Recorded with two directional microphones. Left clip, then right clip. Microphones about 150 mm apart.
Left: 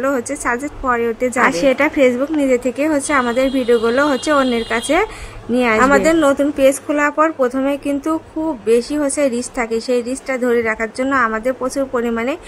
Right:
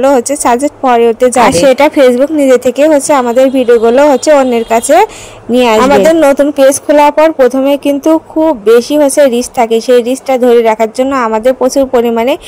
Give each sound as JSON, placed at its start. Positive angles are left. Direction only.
{"t": 0.0, "sound": "speech", "side_deg": -35}